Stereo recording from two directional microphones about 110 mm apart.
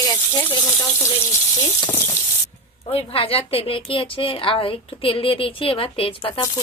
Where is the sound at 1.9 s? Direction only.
25° left (ahead or behind).